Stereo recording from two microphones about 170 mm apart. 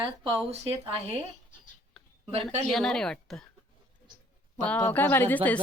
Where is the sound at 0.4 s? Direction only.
40° right (ahead or behind).